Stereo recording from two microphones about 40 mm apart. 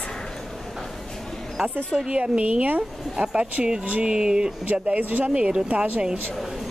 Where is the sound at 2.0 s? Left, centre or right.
Right.